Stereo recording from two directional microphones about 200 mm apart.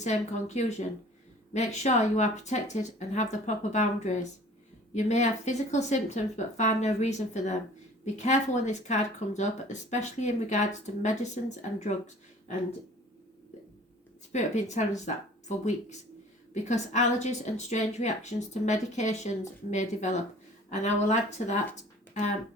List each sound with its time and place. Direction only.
0.0 s speech: 35° left (ahead or behind)
14.3 s speech: 35° left (ahead or behind)
21.8 s a sound: 40° left (ahead or behind)